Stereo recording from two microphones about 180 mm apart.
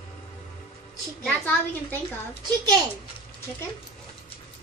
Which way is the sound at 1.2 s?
10° left (ahead or behind).